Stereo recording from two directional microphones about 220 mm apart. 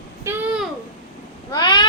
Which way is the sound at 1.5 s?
20° left (ahead or behind).